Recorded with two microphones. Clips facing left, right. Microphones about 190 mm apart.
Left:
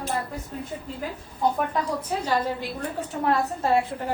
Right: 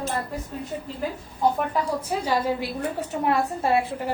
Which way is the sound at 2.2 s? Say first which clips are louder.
Right 2 dB; 10° right (ahead or behind).